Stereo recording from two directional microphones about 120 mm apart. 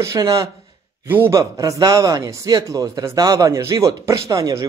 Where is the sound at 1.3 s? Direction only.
25° right (ahead or behind).